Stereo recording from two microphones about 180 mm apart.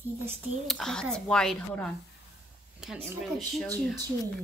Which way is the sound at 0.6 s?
5° left (ahead or behind).